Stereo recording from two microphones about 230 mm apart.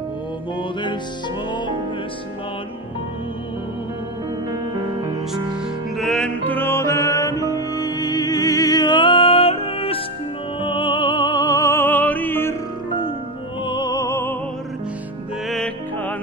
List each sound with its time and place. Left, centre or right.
5.9 s music: centre
13.7 s music: centre
15.4 s music: centre